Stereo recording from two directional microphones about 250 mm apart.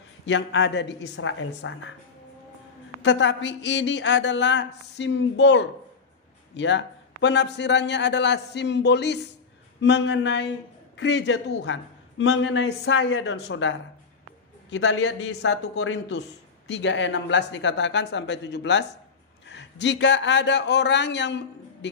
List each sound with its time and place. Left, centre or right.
0.2 s a man's voice: left
3.0 s a man's voice: left